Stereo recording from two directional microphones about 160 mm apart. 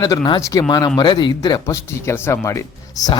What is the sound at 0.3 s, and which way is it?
Speech, 20° left (ahead or behind).